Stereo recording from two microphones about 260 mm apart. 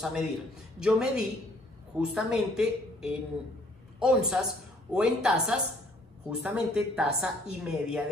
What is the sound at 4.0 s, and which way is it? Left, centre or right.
A man's voice, centre.